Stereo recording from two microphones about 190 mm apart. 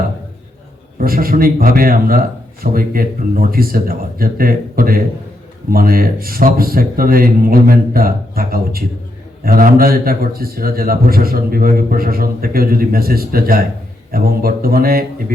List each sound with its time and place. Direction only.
0.9 s a man's voice: 50° right (ahead or behind)